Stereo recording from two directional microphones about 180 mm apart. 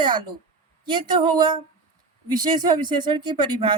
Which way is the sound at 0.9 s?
25° right (ahead or behind).